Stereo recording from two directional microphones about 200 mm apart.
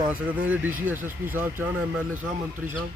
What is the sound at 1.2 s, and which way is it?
Speech, 10° right (ahead or behind).